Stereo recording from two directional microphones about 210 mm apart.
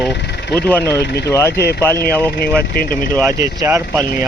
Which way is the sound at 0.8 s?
50° left (ahead or behind).